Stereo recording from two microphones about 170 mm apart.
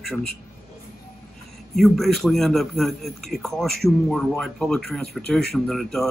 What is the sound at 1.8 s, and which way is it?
A man's voice, centre (ahead or behind).